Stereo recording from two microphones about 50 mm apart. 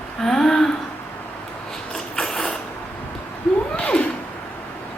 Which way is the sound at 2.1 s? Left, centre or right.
Centre.